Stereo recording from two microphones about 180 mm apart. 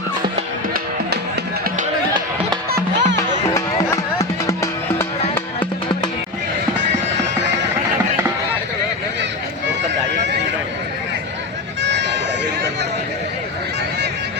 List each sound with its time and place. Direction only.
2.6 s music: 70° right (ahead or behind)
3.5 s music: 20° left (ahead or behind)
11.8 s a sound: 75° right (ahead or behind)